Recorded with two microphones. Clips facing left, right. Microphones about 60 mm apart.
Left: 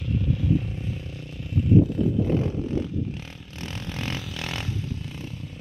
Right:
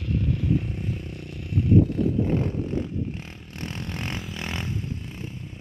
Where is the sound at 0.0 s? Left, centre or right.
Right.